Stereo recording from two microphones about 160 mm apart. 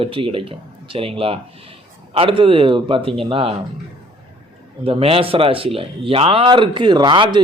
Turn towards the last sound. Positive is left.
turn(degrees=-30)  # may be behind; listen again after turning